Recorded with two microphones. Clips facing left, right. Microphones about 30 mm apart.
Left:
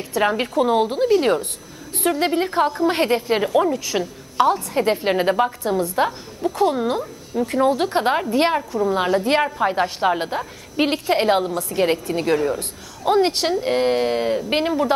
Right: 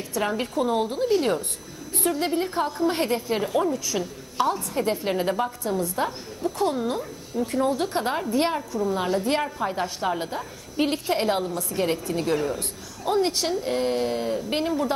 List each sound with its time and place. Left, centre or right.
0.2 s a woman's voice: left